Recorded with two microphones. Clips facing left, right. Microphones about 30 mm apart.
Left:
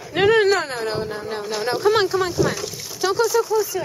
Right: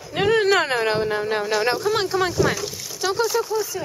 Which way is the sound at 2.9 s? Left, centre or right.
Centre.